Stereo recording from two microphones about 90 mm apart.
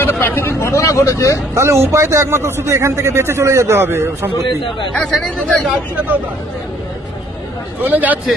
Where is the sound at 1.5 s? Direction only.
30° right (ahead or behind).